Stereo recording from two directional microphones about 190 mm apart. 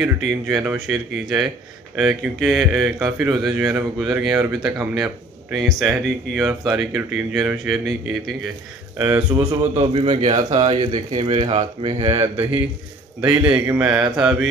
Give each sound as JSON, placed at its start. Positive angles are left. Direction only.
{"t": 0.0, "sound": "speech", "side_deg": 0}
{"t": 8.9, "sound": "speech", "side_deg": -10}
{"t": 9.8, "sound": "speech", "side_deg": -30}
{"t": 10.6, "sound": "speech", "side_deg": -25}
{"t": 13.5, "sound": "speech", "side_deg": -5}